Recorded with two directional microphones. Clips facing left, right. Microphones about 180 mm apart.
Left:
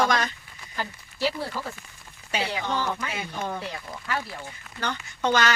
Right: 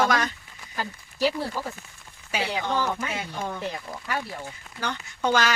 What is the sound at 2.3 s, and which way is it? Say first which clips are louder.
Speech: even; 10° right (ahead or behind).